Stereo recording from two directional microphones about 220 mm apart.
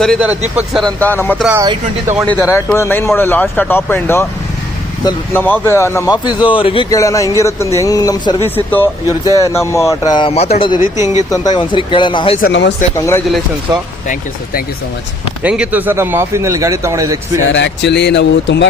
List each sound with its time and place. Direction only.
0.0 s speech: centre (ahead or behind)
1.6 s speech: 20° right (ahead or behind)
2.3 s speech: 10° left (ahead or behind)
11.0 s a man's voice: 15° right (ahead or behind)
11.3 s speech: 20° left (ahead or behind)
12.4 s speech: 50° left (ahead or behind)
13.0 s speech: 10° left (ahead or behind)
15.4 s a man's voice: 5° right (ahead or behind)
17.5 s speech: 55° left (ahead or behind)